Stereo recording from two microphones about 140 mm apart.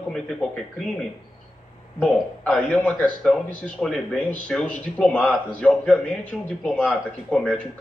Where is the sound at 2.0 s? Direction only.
5° left (ahead or behind).